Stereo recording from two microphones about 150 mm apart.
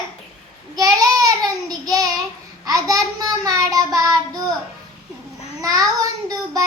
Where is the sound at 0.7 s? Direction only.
25° right (ahead or behind).